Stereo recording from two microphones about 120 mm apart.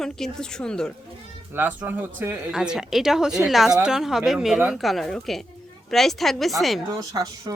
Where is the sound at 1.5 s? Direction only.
15° right (ahead or behind).